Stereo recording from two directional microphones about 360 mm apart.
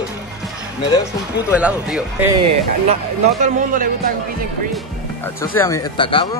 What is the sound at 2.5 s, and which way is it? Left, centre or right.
Speech, centre.